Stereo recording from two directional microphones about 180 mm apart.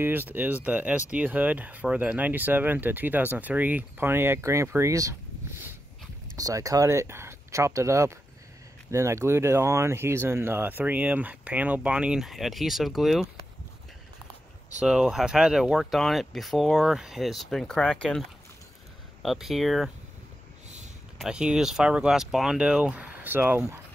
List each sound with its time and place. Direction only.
0.0 s speech: 10° right (ahead or behind)
6.3 s speech: 20° right (ahead or behind); by 13.3 s centre (ahead or behind)
14.8 s speech: 5° right (ahead or behind)
19.2 s speech: centre (ahead or behind)
21.2 s speech: 5° right (ahead or behind)